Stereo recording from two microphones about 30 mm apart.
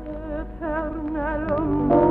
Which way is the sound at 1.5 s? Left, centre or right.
Centre.